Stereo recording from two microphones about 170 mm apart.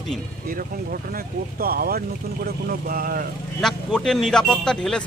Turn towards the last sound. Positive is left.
turn(degrees=5)  # may be behind; listen again after turning